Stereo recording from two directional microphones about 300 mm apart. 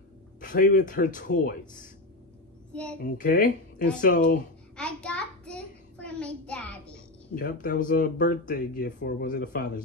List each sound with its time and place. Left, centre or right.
0.4 s speech: left
2.7 s a child's voice: centre
3.0 s speech: left
4.7 s child singing: centre
7.3 s speech: left